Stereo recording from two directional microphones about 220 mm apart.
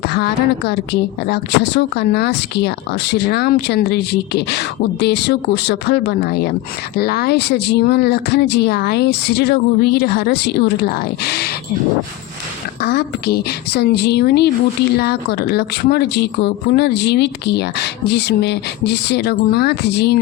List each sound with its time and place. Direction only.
0.1 s speech: 50° left (ahead or behind)
12.8 s speech: 45° left (ahead or behind)